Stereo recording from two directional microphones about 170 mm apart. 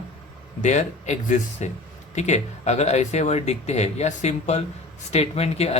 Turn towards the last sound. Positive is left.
turn(degrees=35)  # may be behind; listen again after turning